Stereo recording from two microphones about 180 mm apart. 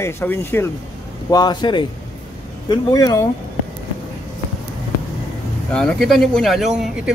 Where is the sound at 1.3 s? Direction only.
25° left (ahead or behind).